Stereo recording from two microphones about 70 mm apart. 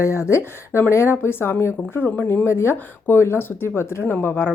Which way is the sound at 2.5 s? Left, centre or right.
Left.